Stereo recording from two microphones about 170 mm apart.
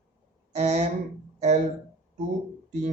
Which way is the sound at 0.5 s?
40° right (ahead or behind).